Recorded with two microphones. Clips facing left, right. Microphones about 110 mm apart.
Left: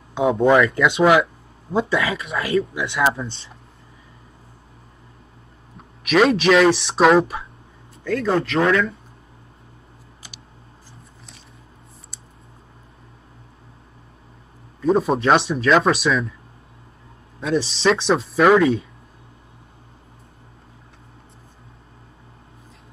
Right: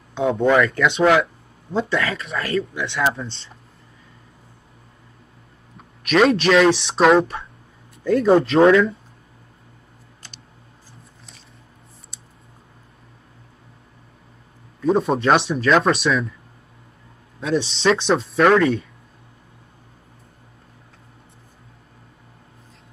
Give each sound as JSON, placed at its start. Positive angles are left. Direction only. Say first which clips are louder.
{"t": 0.1, "sound": "speech", "louder": "left 2 dB", "side_deg": 5}
{"t": 6.0, "sound": "speech", "louder": "even", "side_deg": 0}
{"t": 8.0, "sound": "speech", "louder": "right 5 dB", "side_deg": -20}
{"t": 14.8, "sound": "speech", "louder": "even", "side_deg": 0}
{"t": 17.4, "sound": "speech", "louder": "even", "side_deg": 0}